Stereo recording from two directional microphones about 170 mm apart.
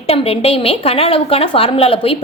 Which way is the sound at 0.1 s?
35° left (ahead or behind).